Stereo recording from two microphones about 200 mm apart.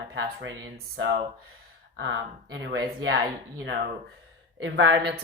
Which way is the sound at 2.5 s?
65° right (ahead or behind).